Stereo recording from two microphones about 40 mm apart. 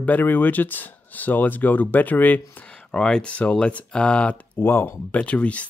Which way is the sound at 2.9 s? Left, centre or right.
Left.